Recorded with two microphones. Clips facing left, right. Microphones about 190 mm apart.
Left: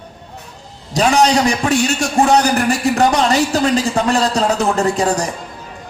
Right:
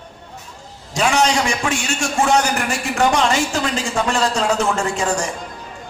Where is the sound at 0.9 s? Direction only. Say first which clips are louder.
Left 4 dB; 35° left (ahead or behind).